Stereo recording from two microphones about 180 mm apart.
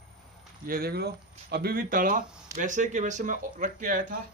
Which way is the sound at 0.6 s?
55° right (ahead or behind).